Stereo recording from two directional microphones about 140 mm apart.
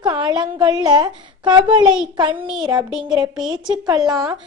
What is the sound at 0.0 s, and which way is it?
A woman's voice, 30° right (ahead or behind).